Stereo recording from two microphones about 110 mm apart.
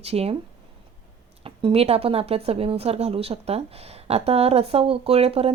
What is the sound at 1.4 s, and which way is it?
A woman's voice, 55° right (ahead or behind).